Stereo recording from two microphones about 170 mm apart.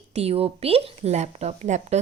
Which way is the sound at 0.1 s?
35° right (ahead or behind).